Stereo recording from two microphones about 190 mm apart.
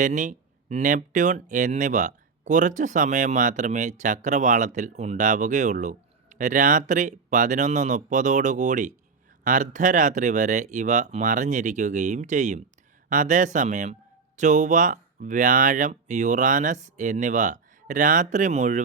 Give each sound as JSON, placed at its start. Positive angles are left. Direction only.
{"t": 0.0, "sound": "speech", "side_deg": -40}